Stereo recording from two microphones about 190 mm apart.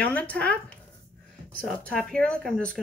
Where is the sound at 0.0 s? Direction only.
5° left (ahead or behind).